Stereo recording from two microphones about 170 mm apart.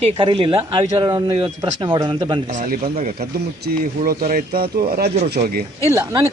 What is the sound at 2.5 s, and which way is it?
Speech, 55° right (ahead or behind).